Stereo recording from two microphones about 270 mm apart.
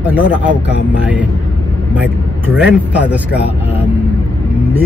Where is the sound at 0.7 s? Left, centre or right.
Left.